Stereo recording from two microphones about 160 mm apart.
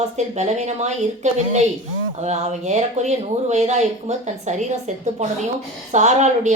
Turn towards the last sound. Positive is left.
turn(degrees=-45)  # may be behind; listen again after turning